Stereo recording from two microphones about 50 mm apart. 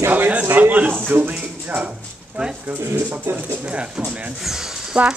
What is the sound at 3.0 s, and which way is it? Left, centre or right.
Speech, right.